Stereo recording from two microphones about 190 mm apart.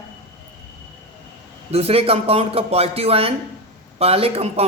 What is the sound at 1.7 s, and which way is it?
Speech, 30° right (ahead or behind).